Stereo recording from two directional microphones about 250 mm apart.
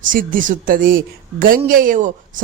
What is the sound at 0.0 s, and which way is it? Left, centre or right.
A woman's voice, right.